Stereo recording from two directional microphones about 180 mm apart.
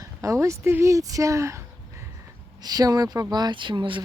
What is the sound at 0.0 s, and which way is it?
Speech, 15° right (ahead or behind).